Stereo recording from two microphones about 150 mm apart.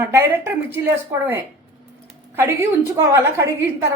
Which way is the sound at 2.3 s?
15° right (ahead or behind).